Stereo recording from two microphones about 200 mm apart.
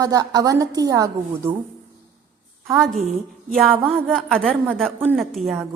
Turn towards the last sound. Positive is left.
turn(degrees=0)  # may be behind; listen again after turning